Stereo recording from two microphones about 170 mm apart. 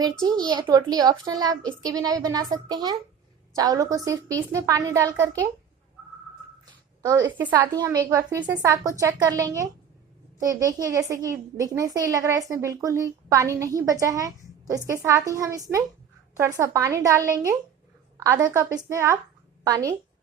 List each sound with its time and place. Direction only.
0.0 s a woman's voice: 25° right (ahead or behind)
7.0 s a woman's voice: 20° right (ahead or behind)